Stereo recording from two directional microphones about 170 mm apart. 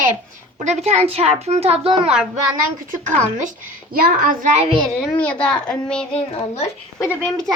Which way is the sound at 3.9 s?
60° right (ahead or behind).